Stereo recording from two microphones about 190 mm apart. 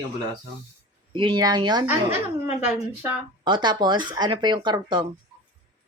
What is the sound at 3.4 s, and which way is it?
A woman's voice, 25° right (ahead or behind).